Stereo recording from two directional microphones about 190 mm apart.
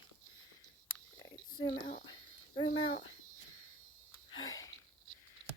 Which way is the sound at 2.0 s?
25° left (ahead or behind).